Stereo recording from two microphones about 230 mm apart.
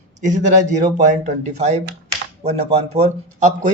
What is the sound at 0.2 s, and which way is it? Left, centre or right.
A man's voice, right.